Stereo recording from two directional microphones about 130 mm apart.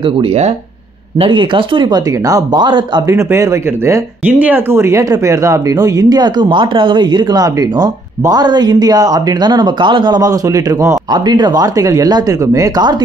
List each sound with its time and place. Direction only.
0.2 s speech: 50° right (ahead or behind)
1.2 s speech: 40° right (ahead or behind)
3.2 s speech: 20° right (ahead or behind)